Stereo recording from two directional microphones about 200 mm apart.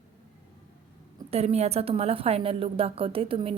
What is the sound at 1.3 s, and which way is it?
Speech, 30° right (ahead or behind).